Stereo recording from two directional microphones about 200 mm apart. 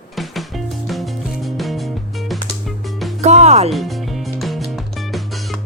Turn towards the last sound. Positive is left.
turn(degrees=0)  # may be behind; listen again after turning